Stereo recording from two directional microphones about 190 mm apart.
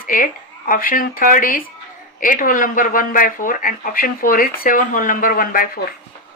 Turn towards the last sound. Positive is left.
turn(degrees=50)  # may be behind; listen again after turning